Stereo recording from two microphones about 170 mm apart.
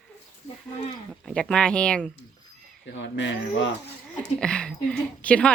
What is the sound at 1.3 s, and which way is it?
Speech, 5° left (ahead or behind).